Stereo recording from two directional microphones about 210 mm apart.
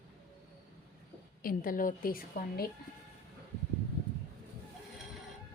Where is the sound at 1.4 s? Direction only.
40° left (ahead or behind).